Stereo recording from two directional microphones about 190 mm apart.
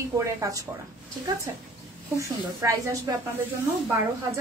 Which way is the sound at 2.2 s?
15° right (ahead or behind).